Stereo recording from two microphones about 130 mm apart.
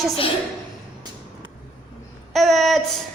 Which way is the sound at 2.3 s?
Centre (ahead or behind).